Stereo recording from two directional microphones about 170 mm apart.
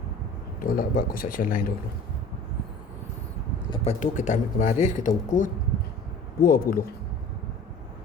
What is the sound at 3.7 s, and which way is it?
Speech, 40° left (ahead or behind).